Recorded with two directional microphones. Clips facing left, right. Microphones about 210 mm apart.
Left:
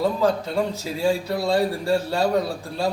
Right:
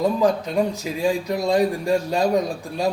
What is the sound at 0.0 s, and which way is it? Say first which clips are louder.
Speech: right 2 dB; 15° right (ahead or behind).